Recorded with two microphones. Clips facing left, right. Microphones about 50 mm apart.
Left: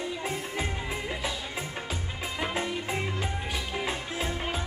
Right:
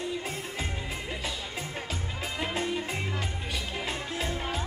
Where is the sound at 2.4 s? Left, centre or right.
Centre.